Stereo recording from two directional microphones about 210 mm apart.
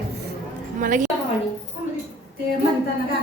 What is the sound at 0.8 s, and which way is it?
Speech, 35° right (ahead or behind).